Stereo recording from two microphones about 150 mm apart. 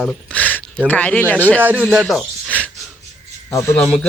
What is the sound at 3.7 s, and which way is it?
Speech, 5° left (ahead or behind).